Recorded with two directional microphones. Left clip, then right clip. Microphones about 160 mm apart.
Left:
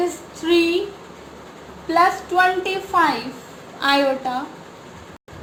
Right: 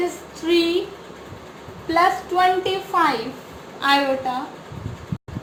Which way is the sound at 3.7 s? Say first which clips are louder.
Even; 60° left (ahead or behind).